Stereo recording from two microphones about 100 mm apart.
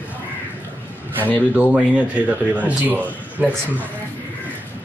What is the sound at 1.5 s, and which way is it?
A man's voice, 10° right (ahead or behind).